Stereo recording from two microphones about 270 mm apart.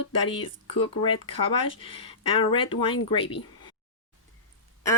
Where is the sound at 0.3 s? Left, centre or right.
Centre.